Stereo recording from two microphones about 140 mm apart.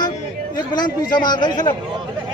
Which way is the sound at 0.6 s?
30° left (ahead or behind).